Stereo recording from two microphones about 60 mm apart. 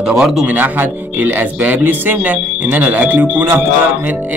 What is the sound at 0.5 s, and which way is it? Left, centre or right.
A man's voice, right.